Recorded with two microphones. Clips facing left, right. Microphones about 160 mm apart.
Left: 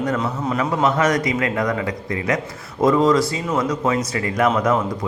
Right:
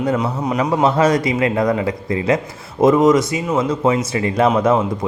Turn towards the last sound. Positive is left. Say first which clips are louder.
# right 4 dB
turn(degrees=-25)  # may be behind; listen again after turning